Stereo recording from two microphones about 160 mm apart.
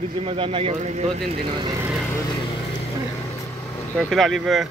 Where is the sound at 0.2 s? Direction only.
35° right (ahead or behind).